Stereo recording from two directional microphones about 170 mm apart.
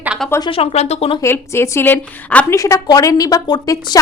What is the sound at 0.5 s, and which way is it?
Speech, 35° left (ahead or behind).